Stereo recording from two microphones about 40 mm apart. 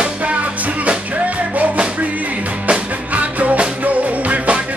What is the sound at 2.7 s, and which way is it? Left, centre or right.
Music, right.